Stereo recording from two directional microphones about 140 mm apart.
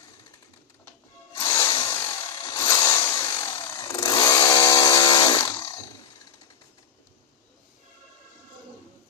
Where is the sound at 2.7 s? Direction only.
30° left (ahead or behind).